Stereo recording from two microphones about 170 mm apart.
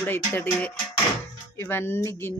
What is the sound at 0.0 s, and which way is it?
A child's voice, 10° left (ahead or behind).